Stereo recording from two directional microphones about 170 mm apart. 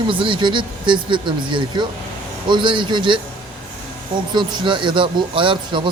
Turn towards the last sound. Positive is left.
turn(degrees=-30)  # may be behind; listen again after turning